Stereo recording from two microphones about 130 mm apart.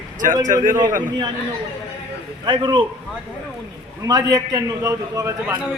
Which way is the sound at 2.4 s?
35° right (ahead or behind).